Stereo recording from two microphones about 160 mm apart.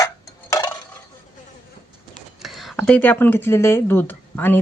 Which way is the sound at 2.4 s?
Centre (ahead or behind).